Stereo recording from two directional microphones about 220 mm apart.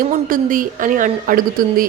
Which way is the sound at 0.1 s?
40° right (ahead or behind).